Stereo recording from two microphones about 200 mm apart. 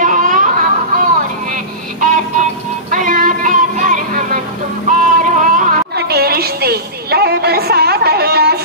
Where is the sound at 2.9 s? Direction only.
40° right (ahead or behind).